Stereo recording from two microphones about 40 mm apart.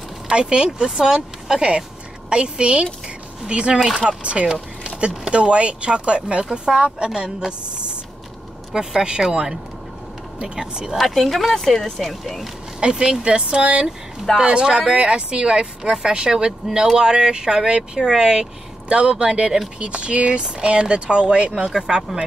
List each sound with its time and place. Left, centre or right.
0.3 s speech: right
4.5 s a sound: centre
5.2 s speech: right
11.0 s speech: centre
12.8 s speech: centre